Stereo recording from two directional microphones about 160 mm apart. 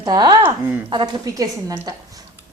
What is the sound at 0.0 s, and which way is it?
Speech, 25° right (ahead or behind).